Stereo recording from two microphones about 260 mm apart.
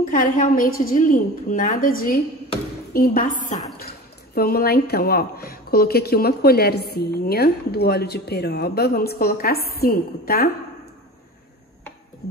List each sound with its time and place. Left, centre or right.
0.0 s a woman's voice: left